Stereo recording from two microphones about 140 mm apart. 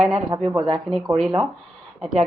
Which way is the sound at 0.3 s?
30° right (ahead or behind).